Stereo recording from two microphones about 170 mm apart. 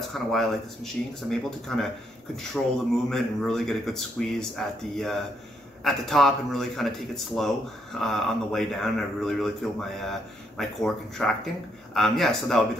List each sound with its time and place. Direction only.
0.1 s a man's voice: centre (ahead or behind)